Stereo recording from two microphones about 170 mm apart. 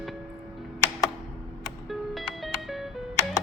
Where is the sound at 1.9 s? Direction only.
Centre (ahead or behind).